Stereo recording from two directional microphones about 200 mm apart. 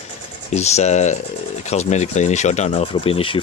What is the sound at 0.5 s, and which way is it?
Speech, 35° left (ahead or behind).